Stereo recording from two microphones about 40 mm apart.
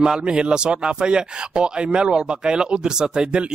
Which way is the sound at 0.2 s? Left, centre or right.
Right.